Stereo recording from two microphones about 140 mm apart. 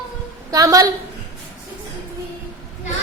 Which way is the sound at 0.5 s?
25° right (ahead or behind).